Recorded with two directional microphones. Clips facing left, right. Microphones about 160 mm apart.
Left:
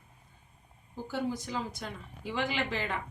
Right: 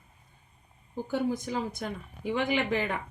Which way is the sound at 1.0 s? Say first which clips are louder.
Right 4 dB; 55° right (ahead or behind).